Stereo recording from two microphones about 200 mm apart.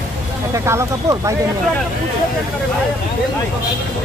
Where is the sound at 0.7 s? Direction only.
15° right (ahead or behind).